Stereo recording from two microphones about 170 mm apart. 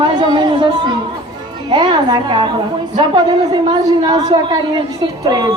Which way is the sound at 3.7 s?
25° right (ahead or behind).